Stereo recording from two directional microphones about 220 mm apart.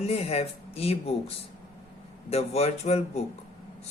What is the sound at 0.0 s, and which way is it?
A man's voice, 30° left (ahead or behind).